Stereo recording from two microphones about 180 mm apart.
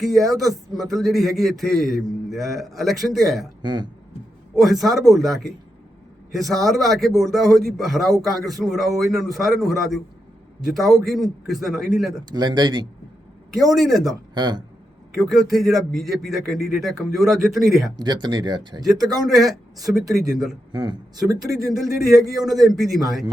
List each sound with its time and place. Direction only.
0.0 s a man's voice: centre (ahead or behind)
3.6 s speech: 25° right (ahead or behind)
4.5 s a man's voice: centre (ahead or behind)
12.3 s speech: 25° right (ahead or behind)
13.5 s a man's voice: centre (ahead or behind)
14.3 s speech: 25° right (ahead or behind)
15.2 s a man's voice: centre (ahead or behind)
17.9 s speech: 25° right (ahead or behind)
19.2 s a man's voice: centre (ahead or behind)
20.7 s speech: 25° right (ahead or behind)
22.3 s a man's voice: centre (ahead or behind)